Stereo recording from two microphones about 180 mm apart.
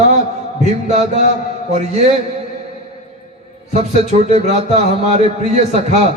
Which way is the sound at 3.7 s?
40° right (ahead or behind).